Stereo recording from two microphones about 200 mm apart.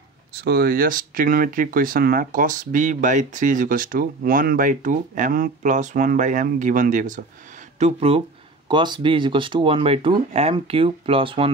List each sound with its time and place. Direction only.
0.3 s speech: 50° right (ahead or behind)
7.8 s speech: 30° right (ahead or behind)